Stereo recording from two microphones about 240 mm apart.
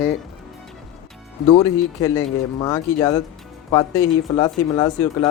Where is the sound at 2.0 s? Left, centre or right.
Centre.